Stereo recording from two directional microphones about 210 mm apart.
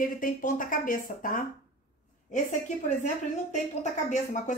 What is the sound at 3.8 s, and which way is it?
Speech, 35° left (ahead or behind).